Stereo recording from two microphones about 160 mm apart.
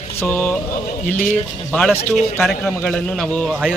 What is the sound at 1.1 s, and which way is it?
Speech, 65° left (ahead or behind).